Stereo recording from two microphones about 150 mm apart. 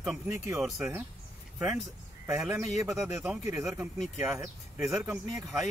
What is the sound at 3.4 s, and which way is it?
Speech, 20° right (ahead or behind).